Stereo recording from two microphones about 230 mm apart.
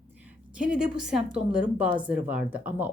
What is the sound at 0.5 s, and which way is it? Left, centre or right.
Speech, centre.